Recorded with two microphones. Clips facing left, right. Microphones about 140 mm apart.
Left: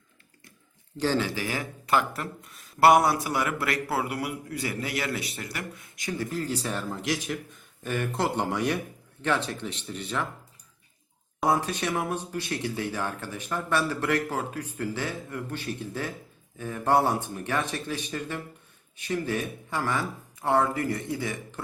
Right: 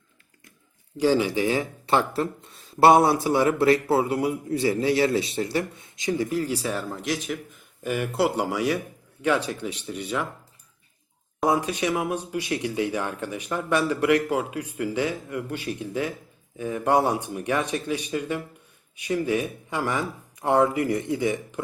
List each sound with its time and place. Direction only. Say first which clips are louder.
0.9 s speech: right 5 dB; 10° right (ahead or behind)
7.9 s speech: right 4 dB; 10° right (ahead or behind)
11.4 s speech: right 3 dB; 15° right (ahead or behind)